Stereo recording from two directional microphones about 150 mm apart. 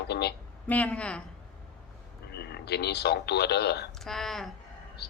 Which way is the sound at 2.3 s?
90° left.